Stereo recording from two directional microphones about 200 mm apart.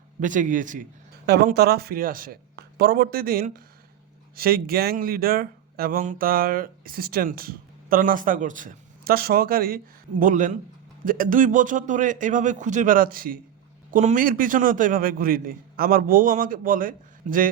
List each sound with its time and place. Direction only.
0.2 s a man's voice: 40° right (ahead or behind)
1.3 s a man's voice: 50° right (ahead or behind)